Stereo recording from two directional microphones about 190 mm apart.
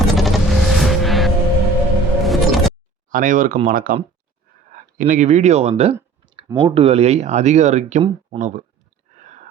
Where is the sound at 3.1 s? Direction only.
45° right (ahead or behind).